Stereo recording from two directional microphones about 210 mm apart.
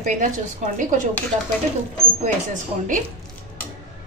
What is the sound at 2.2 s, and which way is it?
Speech, 35° right (ahead or behind).